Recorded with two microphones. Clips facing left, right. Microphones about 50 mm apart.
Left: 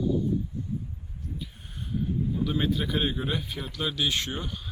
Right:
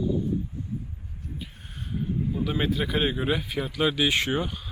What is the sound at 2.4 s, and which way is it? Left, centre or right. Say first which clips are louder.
Speech: right 1 dB; centre.